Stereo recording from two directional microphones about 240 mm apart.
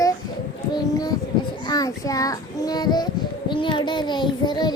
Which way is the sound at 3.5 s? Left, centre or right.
Centre.